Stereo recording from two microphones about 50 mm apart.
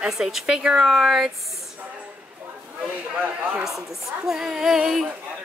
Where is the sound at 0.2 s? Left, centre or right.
Centre.